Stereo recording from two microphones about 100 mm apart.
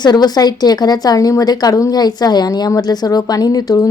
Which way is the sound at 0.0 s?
45° left (ahead or behind).